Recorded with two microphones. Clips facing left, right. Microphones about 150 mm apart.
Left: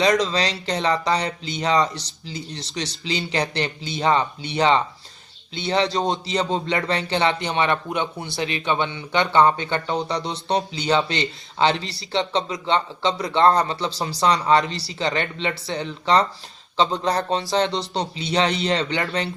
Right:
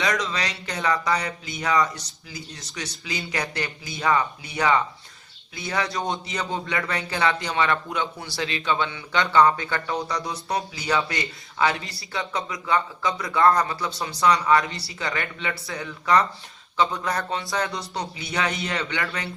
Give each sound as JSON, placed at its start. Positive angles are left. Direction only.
{"t": 0.0, "sound": "a man's voice", "side_deg": 30}